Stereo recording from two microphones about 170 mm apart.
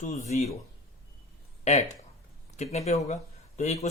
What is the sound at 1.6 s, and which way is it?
Speech, 40° left (ahead or behind).